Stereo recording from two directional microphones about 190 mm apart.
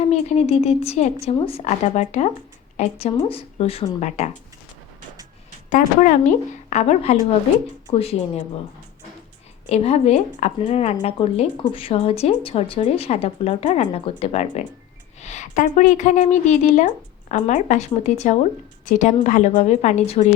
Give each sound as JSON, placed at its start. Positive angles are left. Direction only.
{"t": 0.0, "sound": "a woman's voice", "side_deg": 35}
{"t": 5.7, "sound": "a woman's voice", "side_deg": 40}
{"t": 9.6, "sound": "a woman's voice", "side_deg": 35}